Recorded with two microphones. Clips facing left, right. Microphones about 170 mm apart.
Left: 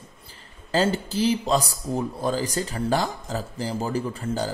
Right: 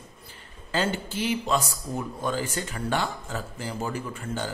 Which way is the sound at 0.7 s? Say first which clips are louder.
Left 5 dB; 35° left (ahead or behind).